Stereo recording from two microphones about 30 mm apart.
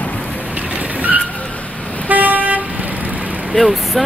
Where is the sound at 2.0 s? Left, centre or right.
Right.